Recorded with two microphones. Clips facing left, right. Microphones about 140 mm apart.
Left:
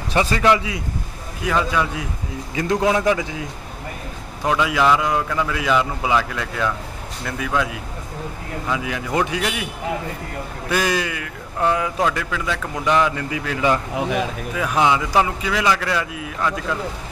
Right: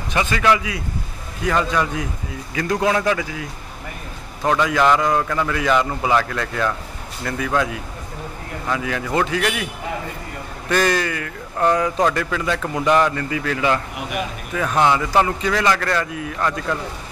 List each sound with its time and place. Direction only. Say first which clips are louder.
0.1 s a man's voice: left 2 dB; 35° left (ahead or behind)
0.5 s speech: right 2 dB; 25° left (ahead or behind)
1.4 s speech: right 1 dB; 5° left (ahead or behind)
2.5 s speech: left 1 dB; 20° left (ahead or behind)
4.5 s speech: right 1 dB; 5° left (ahead or behind)
10.7 s speech: right 2 dB; 10° left (ahead or behind)
13.1 s speech: right 2 dB; 10° left (ahead or behind)